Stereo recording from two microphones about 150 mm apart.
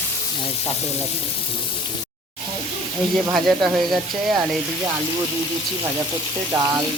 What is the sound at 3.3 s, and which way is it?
Speech, centre (ahead or behind).